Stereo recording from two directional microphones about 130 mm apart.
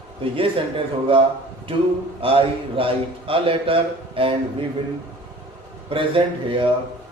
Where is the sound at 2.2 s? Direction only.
45° right (ahead or behind).